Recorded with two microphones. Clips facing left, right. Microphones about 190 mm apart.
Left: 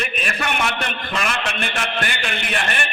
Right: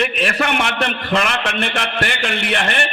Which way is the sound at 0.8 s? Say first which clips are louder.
Right 6 dB; 60° right (ahead or behind).